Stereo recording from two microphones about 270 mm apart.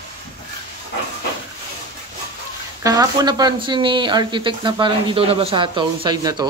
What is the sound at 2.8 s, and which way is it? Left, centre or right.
Speech, centre.